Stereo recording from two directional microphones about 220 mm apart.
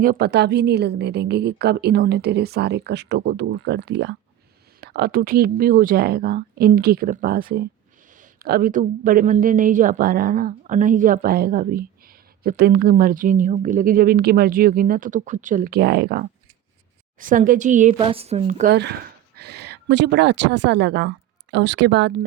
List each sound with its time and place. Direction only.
0.0 s a woman's voice: 45° right (ahead or behind)
17.9 s speech: 25° right (ahead or behind)
18.7 s a woman's voice: 50° right (ahead or behind)